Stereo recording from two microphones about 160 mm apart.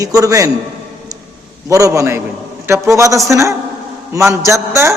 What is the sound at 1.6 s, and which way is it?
A man's voice, 20° right (ahead or behind).